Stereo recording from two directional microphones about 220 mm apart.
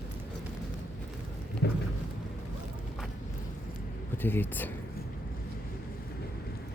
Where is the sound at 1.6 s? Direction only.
50° left (ahead or behind).